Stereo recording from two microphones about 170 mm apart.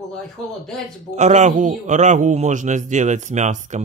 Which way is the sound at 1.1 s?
45° right (ahead or behind).